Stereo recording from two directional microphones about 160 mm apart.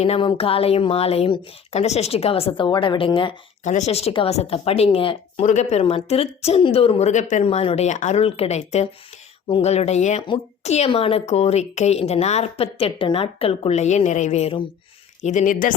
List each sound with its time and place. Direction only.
0.0 s speech: 35° left (ahead or behind)
3.6 s speech: 50° left (ahead or behind)